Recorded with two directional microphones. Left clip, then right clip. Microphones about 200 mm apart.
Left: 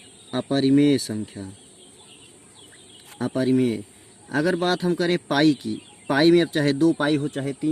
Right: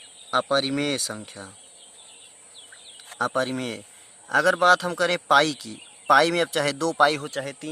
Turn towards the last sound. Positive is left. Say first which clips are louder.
# left 4 dB
turn(degrees=-35)  # may be behind; listen again after turning